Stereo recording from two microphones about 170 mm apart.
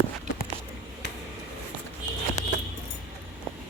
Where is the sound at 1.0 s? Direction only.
80° left.